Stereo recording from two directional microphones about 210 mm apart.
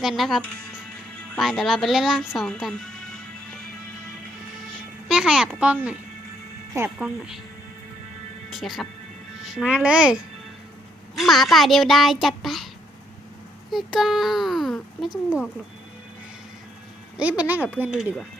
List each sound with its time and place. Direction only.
0.0 s a child's voice: centre (ahead or behind)
5.0 s a child's voice: 5° right (ahead or behind)
8.5 s a child's voice: centre (ahead or behind)
11.2 s a child's voice: centre (ahead or behind)
13.7 s a child's voice: centre (ahead or behind)
17.2 s speech: 5° right (ahead or behind)